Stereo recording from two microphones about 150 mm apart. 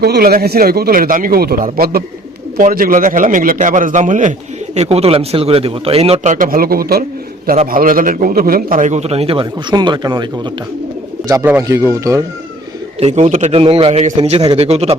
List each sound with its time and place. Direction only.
0.0 s speech: 85° right
2.6 s a man's voice: 65° right (ahead or behind); by 6.3 s 40° right (ahead or behind)
6.3 s speech: 70° right (ahead or behind); by 7.0 s 90° right
7.7 s a man's voice: 65° right (ahead or behind); by 10.5 s 30° right (ahead or behind)
11.4 s speech: 15° right (ahead or behind)
13.0 s a man's voice: 45° right (ahead or behind)